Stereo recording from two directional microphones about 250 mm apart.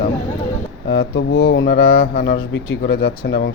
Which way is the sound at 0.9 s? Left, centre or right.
Left.